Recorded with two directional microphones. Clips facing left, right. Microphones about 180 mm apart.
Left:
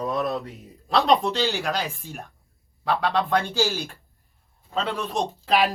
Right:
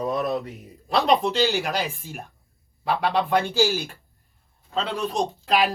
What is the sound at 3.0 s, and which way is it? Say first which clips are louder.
A man's voice: right 2 dB; 15° right (ahead or behind).